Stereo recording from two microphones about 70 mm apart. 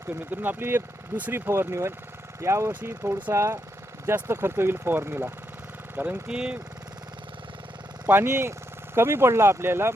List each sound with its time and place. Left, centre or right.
0.1 s speech: right
6.0 s speech: centre
8.0 s speech: right